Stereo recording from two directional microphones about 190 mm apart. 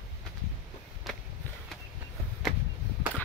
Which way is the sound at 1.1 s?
Centre (ahead or behind).